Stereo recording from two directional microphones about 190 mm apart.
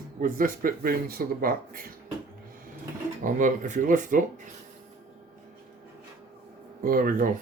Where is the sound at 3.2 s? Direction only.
45° right (ahead or behind).